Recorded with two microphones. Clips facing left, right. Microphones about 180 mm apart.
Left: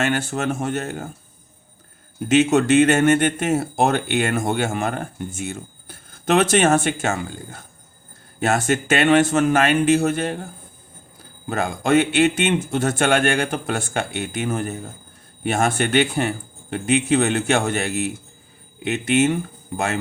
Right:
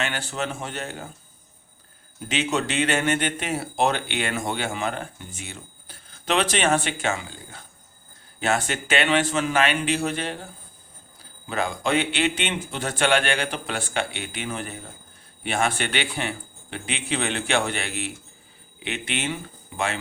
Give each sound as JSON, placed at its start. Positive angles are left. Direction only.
{"t": 0.0, "sound": "speech", "side_deg": 50}
{"t": 2.1, "sound": "speech", "side_deg": 50}